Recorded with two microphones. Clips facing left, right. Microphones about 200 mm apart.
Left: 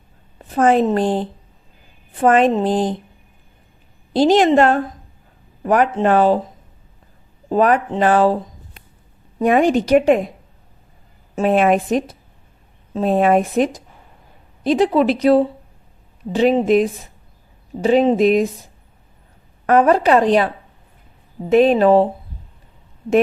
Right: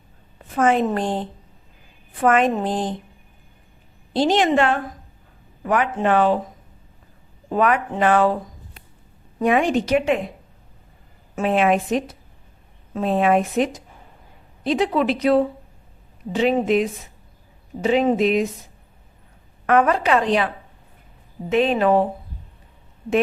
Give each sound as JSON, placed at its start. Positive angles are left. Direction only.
{"t": 0.5, "sound": "a woman's voice", "side_deg": 35}
{"t": 4.1, "sound": "a woman's voice", "side_deg": 40}
{"t": 7.5, "sound": "a woman's voice", "side_deg": 35}
{"t": 9.4, "sound": "a woman's voice", "side_deg": 40}
{"t": 11.4, "sound": "a woman's voice", "side_deg": 40}
{"t": 19.6, "sound": "a woman's voice", "side_deg": 35}
{"t": 21.5, "sound": "a woman's voice", "side_deg": 40}